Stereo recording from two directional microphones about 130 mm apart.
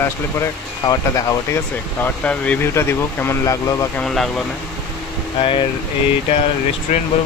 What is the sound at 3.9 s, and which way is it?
Speech, centre (ahead or behind).